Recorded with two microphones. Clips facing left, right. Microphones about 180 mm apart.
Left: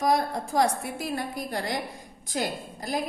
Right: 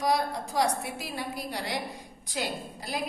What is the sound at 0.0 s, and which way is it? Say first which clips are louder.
A woman's voice: left 3 dB; 50° left (ahead or behind).